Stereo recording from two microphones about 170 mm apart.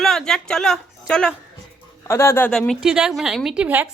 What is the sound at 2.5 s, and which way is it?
A woman's voice, centre (ahead or behind).